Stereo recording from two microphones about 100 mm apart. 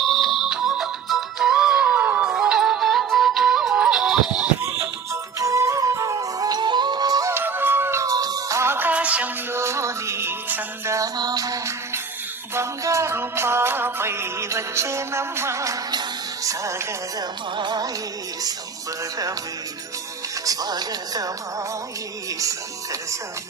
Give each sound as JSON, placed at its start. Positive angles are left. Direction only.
{"t": 0.0, "sound": "music", "side_deg": 0}
{"t": 5.1, "sound": "music", "side_deg": -30}
{"t": 7.3, "sound": "music", "side_deg": -20}
{"t": 9.5, "sound": "music", "side_deg": -25}
{"t": 17.6, "sound": "music", "side_deg": -45}
{"t": 20.4, "sound": "music", "side_deg": -40}
{"t": 22.4, "sound": "music", "side_deg": -35}